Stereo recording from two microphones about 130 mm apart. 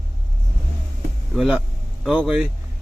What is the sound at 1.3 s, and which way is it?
Speech, 5° right (ahead or behind).